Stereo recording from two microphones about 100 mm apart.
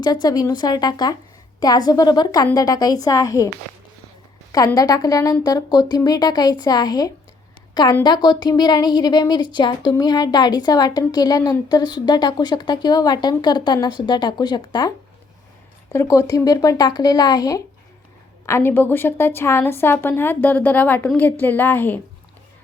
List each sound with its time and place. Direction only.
0.0 s speech: 45° left (ahead or behind)
4.5 s a woman's voice: 35° left (ahead or behind)
15.9 s speech: 30° left (ahead or behind)
18.4 s a woman's voice: 25° left (ahead or behind)